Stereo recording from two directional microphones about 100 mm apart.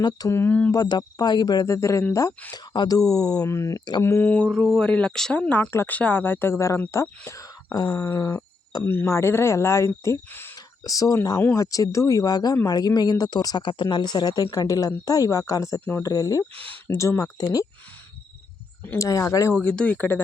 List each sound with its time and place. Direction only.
0.3 s speech: 25° left (ahead or behind)
0.7 s speech: 40° left (ahead or behind); by 4.3 s 25° left (ahead or behind)
4.5 s speech: 10° left (ahead or behind)
5.7 s speech: 20° left (ahead or behind)
15.8 s speech: 20° left (ahead or behind)
16.0 s speech: 35° left (ahead or behind)
18.9 s speech: 35° left (ahead or behind)
19.6 s speech: 10° left (ahead or behind)